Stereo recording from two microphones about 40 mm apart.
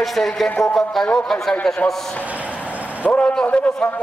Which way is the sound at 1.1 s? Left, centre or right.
Centre.